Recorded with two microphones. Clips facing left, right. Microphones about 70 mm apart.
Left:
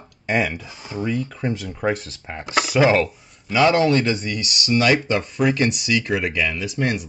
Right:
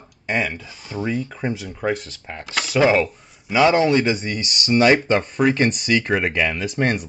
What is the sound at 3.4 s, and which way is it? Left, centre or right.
Speech, centre.